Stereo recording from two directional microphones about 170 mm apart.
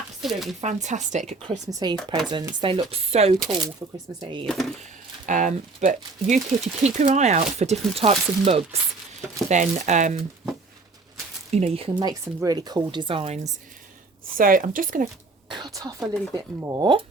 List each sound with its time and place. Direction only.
0.2 s speech: centre (ahead or behind)
0.6 s speech: 45° right (ahead or behind)
1.6 s speech: 25° right (ahead or behind)
3.8 s speech: 20° right (ahead or behind)
4.4 s speech: centre (ahead or behind)
5.2 s speech: 50° right (ahead or behind)
11.5 s speech: 40° right (ahead or behind)
12.0 s speech: 20° right (ahead or behind); by 13.5 s 40° right (ahead or behind)
14.3 s speech: 55° right (ahead or behind)
15.4 s a sound: 25° right (ahead or behind)
16.3 s speech: 20° right (ahead or behind)